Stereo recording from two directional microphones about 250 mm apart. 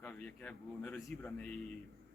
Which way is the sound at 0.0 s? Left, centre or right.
Centre.